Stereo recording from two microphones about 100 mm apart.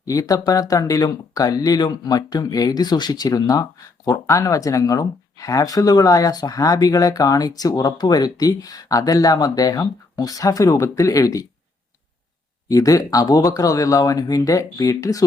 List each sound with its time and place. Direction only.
0.0 s speech: 35° left (ahead or behind)
12.6 s speech: 35° left (ahead or behind)